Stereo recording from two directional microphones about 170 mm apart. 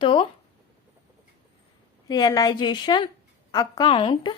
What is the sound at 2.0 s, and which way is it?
A woman's voice, 25° left (ahead or behind).